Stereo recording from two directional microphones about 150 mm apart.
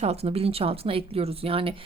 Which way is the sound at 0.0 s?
45° right (ahead or behind).